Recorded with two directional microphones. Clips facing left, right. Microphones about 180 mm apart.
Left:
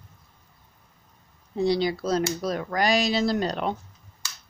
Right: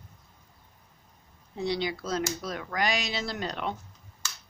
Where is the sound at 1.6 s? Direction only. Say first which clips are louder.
Left 7 dB; 35° left (ahead or behind).